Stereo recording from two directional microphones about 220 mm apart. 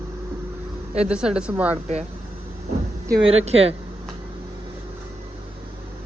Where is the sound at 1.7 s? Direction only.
30° right (ahead or behind).